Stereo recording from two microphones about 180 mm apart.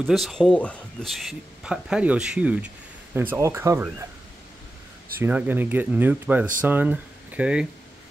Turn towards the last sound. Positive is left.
turn(degrees=-5)  # may be behind; listen again after turning